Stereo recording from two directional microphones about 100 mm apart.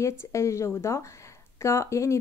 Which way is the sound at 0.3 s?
30° left (ahead or behind).